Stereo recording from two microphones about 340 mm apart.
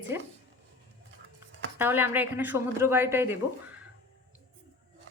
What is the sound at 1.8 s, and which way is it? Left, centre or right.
Speech, centre.